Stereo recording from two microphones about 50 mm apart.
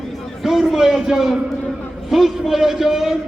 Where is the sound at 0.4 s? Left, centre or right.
Centre.